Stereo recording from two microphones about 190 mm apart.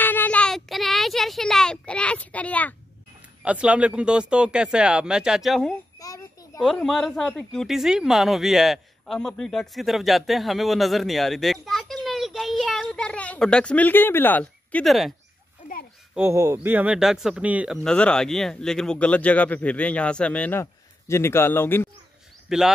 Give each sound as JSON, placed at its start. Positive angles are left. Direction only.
{"t": 0.0, "sound": "child singing", "side_deg": 10}
{"t": 3.4, "sound": "speech", "side_deg": -5}
{"t": 5.9, "sound": "a sound", "side_deg": 15}
{"t": 6.6, "sound": "speech", "side_deg": 0}
{"t": 15.6, "sound": "a sound", "side_deg": 40}
{"t": 16.2, "sound": "speech", "side_deg": -15}
{"t": 17.8, "sound": "speech", "side_deg": 5}
{"t": 22.5, "sound": "speech", "side_deg": 0}